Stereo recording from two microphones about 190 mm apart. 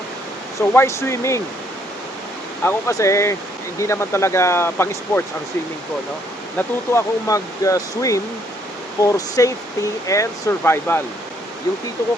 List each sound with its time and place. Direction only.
0.6 s speech: 10° left (ahead or behind)
2.6 s speech: 15° left (ahead or behind)
6.6 s speech: 15° left (ahead or behind)